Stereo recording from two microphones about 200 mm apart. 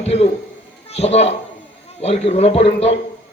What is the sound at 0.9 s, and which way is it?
A man's voice, 35° left (ahead or behind).